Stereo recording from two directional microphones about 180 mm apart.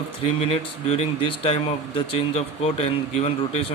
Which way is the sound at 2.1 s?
35° left (ahead or behind).